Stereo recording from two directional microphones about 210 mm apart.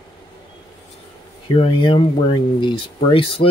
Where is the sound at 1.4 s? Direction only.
25° left (ahead or behind).